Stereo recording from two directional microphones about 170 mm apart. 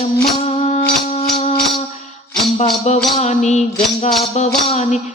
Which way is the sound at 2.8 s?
40° left (ahead or behind).